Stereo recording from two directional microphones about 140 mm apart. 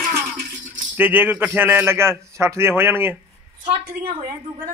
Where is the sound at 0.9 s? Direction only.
15° right (ahead or behind).